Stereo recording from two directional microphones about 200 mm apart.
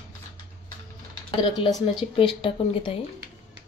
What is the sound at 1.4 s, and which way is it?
A woman's voice, 25° left (ahead or behind).